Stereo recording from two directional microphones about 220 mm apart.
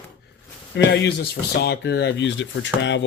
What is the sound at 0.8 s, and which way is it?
Speech, 50° left (ahead or behind).